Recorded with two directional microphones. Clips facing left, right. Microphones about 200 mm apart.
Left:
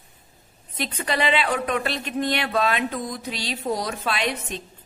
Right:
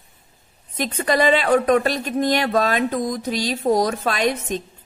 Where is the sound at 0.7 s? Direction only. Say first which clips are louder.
Right 6 dB; 45° right (ahead or behind).